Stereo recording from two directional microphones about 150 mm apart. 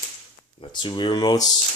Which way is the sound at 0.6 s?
35° left (ahead or behind).